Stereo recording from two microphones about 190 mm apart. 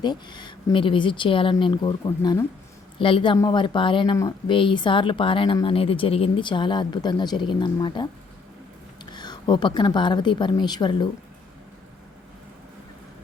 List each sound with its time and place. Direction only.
0.0 s speech: 25° left (ahead or behind)
9.1 s speech: 20° left (ahead or behind)